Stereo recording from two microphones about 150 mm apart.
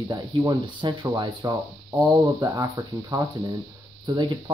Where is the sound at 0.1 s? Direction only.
25° right (ahead or behind).